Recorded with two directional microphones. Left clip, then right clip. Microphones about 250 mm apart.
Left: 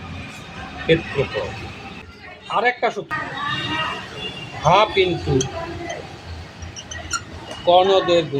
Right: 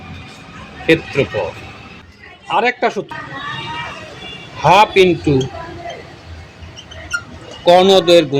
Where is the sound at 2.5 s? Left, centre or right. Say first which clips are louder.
Right 4 dB; right.